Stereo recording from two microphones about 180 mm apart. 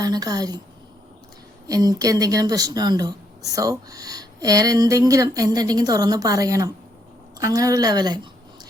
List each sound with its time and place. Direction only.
0.0 s speech: 20° right (ahead or behind)
1.6 s speech: 20° right (ahead or behind)